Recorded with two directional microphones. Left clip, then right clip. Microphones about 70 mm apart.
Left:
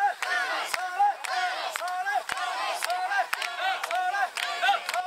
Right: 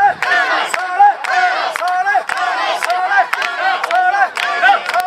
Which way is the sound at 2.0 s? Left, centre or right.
Left.